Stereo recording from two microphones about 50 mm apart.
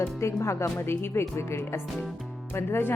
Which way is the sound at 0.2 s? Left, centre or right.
Left.